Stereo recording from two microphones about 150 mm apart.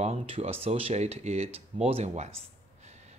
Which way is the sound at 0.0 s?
45° right (ahead or behind).